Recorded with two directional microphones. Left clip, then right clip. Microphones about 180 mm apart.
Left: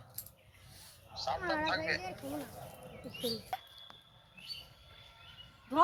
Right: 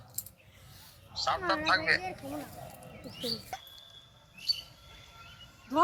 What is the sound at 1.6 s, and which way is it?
Speech, 35° right (ahead or behind).